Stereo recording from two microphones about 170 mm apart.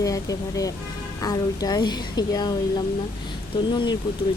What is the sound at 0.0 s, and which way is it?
Speech, 20° left (ahead or behind).